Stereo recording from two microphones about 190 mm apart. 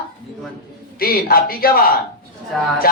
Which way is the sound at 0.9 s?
50° left (ahead or behind).